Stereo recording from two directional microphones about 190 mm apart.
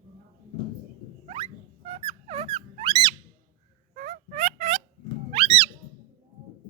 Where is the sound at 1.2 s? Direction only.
35° right (ahead or behind).